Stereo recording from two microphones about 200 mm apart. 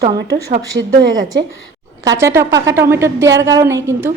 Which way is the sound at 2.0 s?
15° right (ahead or behind).